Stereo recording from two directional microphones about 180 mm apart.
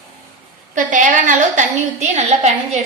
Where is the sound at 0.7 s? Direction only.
45° right (ahead or behind).